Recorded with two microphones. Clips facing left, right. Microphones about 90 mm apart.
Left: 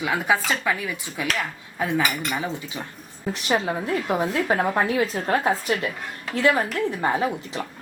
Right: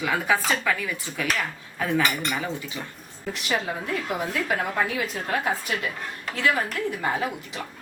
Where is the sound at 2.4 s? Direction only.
20° left (ahead or behind).